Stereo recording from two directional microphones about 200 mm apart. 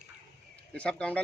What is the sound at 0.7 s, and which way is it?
Speech, 5° left (ahead or behind).